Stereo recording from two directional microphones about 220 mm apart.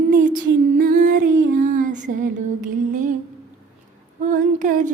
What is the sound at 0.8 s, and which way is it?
Music, 40° right (ahead or behind).